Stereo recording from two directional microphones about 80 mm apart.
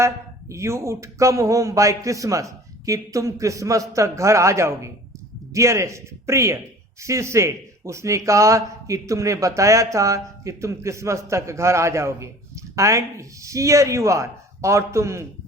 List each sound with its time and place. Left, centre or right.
0.0 s speech: right